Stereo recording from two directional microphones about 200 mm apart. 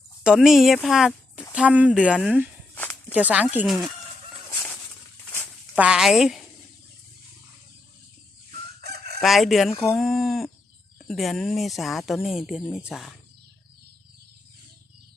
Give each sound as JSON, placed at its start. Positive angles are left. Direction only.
{"t": 0.2, "sound": "speech", "side_deg": 0}
{"t": 2.7, "sound": "walk", "side_deg": 10}
{"t": 3.2, "sound": "speech", "side_deg": -10}
{"t": 5.7, "sound": "speech", "side_deg": -5}
{"t": 8.8, "sound": "chicken", "side_deg": -55}
{"t": 9.2, "sound": "speech", "side_deg": 0}